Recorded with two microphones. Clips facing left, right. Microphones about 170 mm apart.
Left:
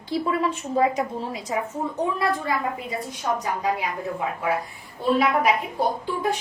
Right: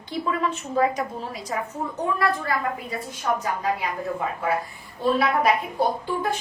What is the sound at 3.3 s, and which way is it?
Speech, 20° left (ahead or behind).